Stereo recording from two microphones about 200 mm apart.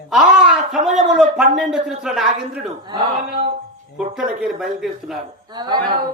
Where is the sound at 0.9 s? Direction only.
Centre (ahead or behind).